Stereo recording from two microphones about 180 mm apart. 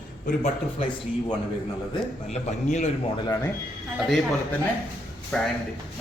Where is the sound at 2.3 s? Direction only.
40° left (ahead or behind).